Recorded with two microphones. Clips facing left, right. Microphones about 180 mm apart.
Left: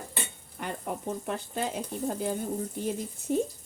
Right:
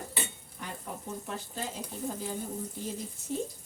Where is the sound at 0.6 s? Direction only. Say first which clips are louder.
Left 7 dB; 65° left (ahead or behind).